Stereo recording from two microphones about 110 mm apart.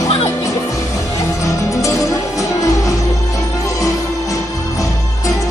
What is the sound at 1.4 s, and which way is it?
Music, 30° left (ahead or behind).